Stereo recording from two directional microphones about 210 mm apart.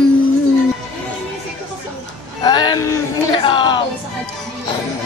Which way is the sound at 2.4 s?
20° left (ahead or behind).